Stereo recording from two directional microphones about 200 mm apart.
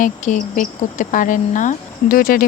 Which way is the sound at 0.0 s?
40° left (ahead or behind).